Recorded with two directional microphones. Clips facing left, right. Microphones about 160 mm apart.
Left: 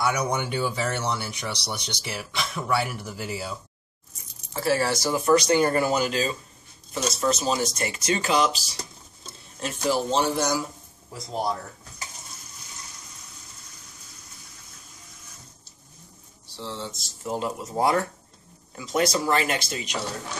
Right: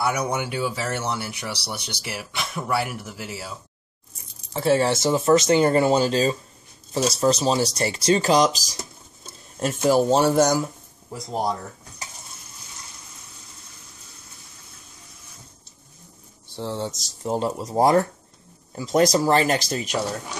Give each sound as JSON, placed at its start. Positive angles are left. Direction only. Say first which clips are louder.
{"t": 0.0, "sound": "speech", "louder": "right 1 dB", "side_deg": -5}
{"t": 4.6, "sound": "speech", "louder": "right 4 dB", "side_deg": -25}
{"t": 9.8, "sound": "a man's voice", "louder": "right 6 dB", "side_deg": -45}
{"t": 16.5, "sound": "speech", "louder": "right 6 dB", "side_deg": -50}